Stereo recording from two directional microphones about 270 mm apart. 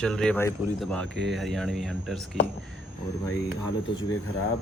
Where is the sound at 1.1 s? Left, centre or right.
Right.